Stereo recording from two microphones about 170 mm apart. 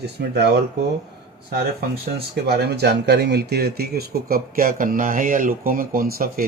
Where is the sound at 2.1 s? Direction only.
65° right (ahead or behind).